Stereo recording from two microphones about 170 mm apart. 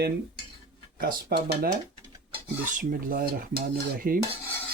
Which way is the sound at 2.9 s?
60° right (ahead or behind).